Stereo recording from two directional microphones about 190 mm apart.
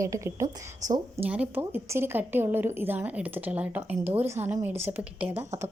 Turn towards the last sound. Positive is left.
turn(degrees=-10)  # may be behind; listen again after turning